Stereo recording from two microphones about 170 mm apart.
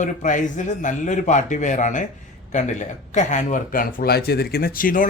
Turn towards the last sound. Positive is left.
turn(degrees=55)  # may be behind; listen again after turning